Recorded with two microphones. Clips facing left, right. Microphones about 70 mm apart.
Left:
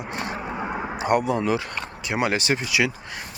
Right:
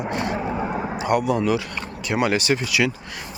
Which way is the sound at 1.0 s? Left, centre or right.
Left.